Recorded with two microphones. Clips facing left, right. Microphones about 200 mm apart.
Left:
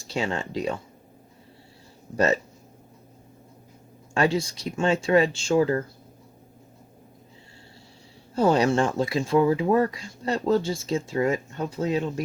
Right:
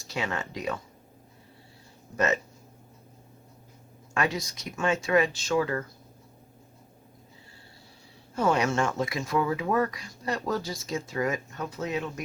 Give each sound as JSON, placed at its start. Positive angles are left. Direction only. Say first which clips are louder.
{"t": 0.1, "sound": "speech", "louder": "left 5 dB", "side_deg": 30}
{"t": 2.1, "sound": "speech", "louder": "left 4 dB", "side_deg": 35}
{"t": 4.1, "sound": "speech", "louder": "left 6 dB", "side_deg": 30}
{"t": 8.4, "sound": "speech", "louder": "left 5 dB", "side_deg": 30}